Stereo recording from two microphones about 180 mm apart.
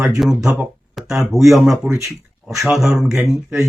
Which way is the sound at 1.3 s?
Centre (ahead or behind).